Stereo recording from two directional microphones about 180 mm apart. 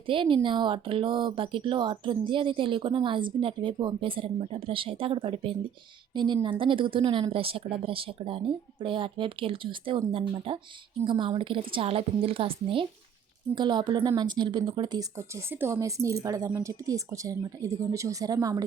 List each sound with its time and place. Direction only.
0.1 s a woman's voice: 30° right (ahead or behind)